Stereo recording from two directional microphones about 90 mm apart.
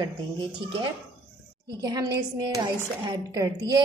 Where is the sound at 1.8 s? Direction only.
45° right (ahead or behind).